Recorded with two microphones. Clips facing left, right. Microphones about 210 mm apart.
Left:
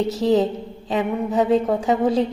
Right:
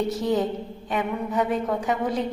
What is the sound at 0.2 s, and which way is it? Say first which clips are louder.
A woman's voice: left 5 dB; 25° left (ahead or behind).